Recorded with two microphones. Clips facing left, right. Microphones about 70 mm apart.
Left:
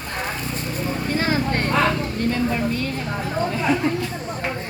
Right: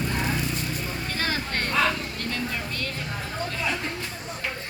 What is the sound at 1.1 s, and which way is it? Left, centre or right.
Vehicle, left.